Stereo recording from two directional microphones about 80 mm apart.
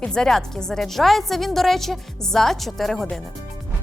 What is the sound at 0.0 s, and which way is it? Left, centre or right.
A woman's voice, centre.